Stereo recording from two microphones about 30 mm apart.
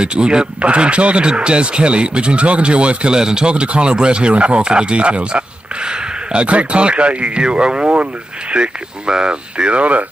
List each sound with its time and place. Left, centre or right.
0.0 s speech: right
3.1 s speech: right
3.6 s speech: right
3.9 s speech: right
6.4 s speech: right
7.4 s speech: right
7.9 s speech: right
8.5 s speech: right